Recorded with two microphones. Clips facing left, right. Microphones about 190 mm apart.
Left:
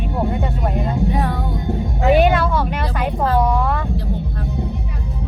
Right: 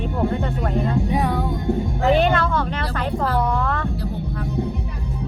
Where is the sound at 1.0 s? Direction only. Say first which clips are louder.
Left 1 dB; 15° right (ahead or behind).